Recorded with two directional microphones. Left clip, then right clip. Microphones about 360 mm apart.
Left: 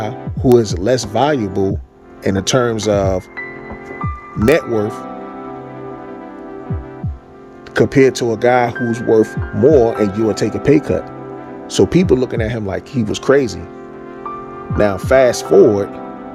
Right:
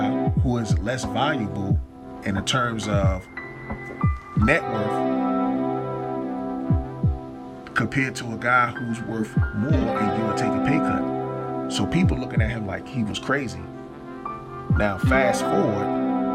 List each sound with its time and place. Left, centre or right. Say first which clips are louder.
0.0 s speech: left 5 dB; centre
7.7 s speech: left 13 dB; centre
14.8 s speech: left 10 dB; centre